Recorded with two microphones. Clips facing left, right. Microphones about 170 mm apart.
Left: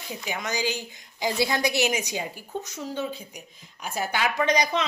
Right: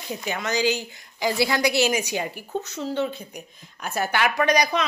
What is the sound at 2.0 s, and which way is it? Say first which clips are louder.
Speech: right 4 dB; 70° right (ahead or behind).